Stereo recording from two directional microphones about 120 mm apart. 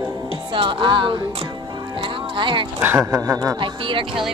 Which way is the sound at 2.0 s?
45° right (ahead or behind).